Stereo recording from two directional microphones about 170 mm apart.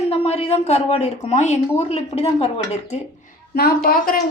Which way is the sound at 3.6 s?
60° left (ahead or behind).